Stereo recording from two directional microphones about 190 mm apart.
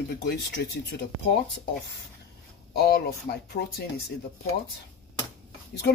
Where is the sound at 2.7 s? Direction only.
55° left (ahead or behind).